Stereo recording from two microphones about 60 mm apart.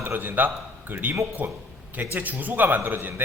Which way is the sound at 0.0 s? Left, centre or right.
Right.